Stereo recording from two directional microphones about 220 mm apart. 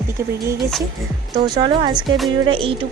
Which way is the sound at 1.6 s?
20° right (ahead or behind).